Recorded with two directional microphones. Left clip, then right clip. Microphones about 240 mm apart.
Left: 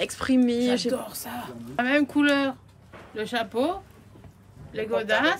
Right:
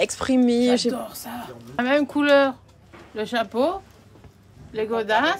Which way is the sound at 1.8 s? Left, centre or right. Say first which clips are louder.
Right 2 dB; centre.